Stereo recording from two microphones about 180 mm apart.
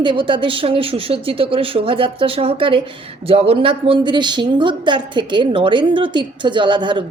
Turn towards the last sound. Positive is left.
turn(degrees=-25)  # may be behind; listen again after turning